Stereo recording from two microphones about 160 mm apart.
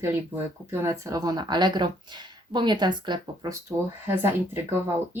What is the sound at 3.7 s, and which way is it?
Speech, 15° right (ahead or behind).